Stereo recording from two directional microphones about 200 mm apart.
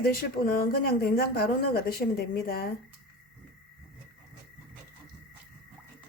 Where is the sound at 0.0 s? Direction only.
45° left (ahead or behind).